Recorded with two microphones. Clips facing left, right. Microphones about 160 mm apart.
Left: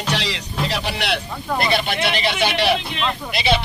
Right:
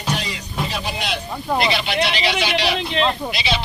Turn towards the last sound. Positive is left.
turn(degrees=55)  # may be behind; listen again after turning